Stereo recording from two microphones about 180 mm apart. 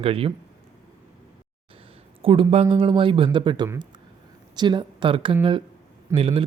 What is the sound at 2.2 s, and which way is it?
A man's voice, 30° right (ahead or behind).